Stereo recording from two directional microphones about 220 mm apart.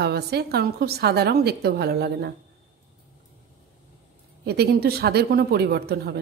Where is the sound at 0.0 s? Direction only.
45° right (ahead or behind).